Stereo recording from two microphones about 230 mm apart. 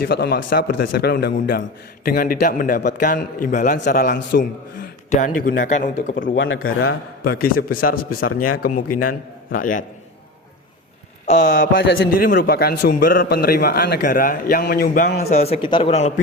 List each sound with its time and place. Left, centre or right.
0.0 s a man's voice: left
6.3 s a man's voice: left
11.3 s a man's voice: left
11.8 s a man's voice: left
12.1 s a man's voice: left
15.3 s speech: left